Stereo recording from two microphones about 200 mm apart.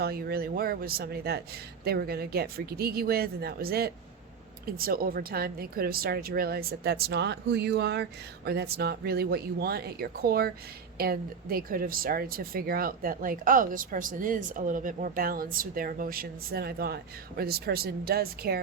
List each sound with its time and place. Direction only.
0.0 s speech: 50° right (ahead or behind)